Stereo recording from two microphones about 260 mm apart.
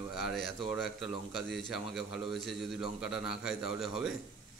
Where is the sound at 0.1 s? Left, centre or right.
Centre.